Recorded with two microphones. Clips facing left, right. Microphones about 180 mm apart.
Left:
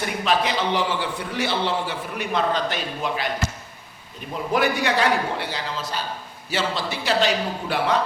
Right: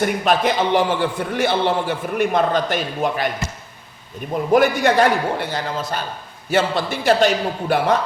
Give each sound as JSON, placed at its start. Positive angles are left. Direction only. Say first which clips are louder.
{"t": 0.0, "sound": "a man's voice", "louder": "right 5 dB", "side_deg": -50}
{"t": 4.5, "sound": "a man's voice", "louder": "right 7 dB", "side_deg": -50}